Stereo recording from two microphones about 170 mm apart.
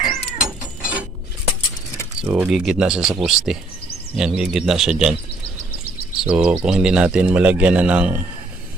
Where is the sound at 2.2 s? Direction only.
15° right (ahead or behind).